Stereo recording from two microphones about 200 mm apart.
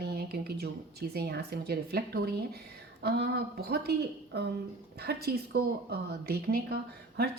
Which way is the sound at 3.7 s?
55° right (ahead or behind).